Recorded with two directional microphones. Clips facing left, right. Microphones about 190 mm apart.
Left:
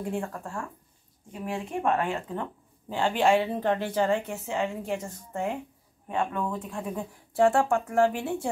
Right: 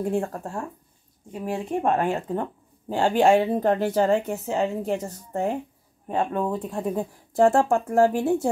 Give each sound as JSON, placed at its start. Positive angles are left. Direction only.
{"t": 0.0, "sound": "speech", "side_deg": -45}